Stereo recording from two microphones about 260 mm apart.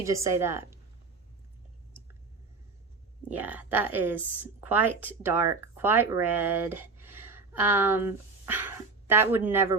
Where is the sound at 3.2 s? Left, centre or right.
Centre.